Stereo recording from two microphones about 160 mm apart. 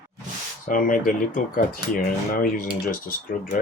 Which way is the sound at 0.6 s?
55° left (ahead or behind).